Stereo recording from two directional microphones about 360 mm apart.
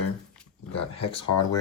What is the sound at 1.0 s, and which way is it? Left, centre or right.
Speech, left.